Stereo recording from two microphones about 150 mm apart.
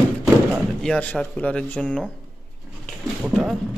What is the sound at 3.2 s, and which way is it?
Speech, 5° right (ahead or behind).